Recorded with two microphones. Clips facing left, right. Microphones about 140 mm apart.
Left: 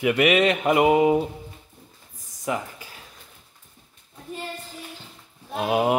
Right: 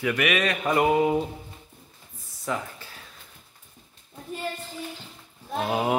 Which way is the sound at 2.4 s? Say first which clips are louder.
Left 2 dB; 15° left (ahead or behind).